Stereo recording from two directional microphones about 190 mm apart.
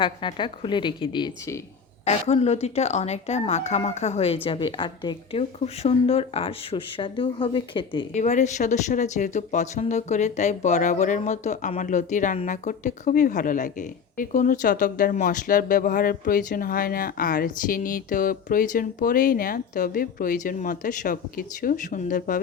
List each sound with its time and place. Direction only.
0.0 s a woman's voice: 25° left (ahead or behind)
2.0 s a woman's voice: 35° left (ahead or behind)
8.2 s speech: 40° left (ahead or behind)